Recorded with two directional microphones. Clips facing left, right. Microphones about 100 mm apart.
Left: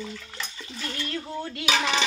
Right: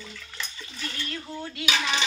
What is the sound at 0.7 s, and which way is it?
Bathtub, 30° left (ahead or behind).